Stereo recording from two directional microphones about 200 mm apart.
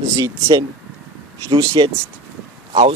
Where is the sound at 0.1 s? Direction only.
15° right (ahead or behind).